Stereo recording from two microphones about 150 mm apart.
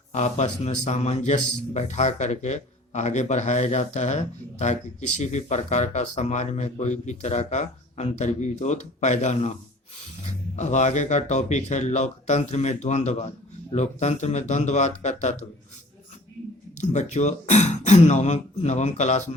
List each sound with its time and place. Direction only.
0.1 s a man's voice: 50° left (ahead or behind)
10.5 s a man's voice: 50° left (ahead or behind)
16.8 s a man's voice: 50° left (ahead or behind)